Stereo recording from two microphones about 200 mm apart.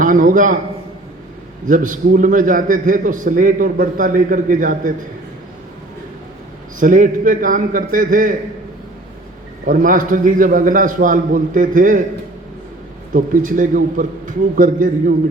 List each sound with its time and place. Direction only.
0.0 s a man's voice: 40° right (ahead or behind)
1.6 s a man's voice: 40° right (ahead or behind)
6.7 s a man's voice: 40° right (ahead or behind)
9.6 s a man's voice: 45° right (ahead or behind)
13.1 s a man's voice: 40° right (ahead or behind)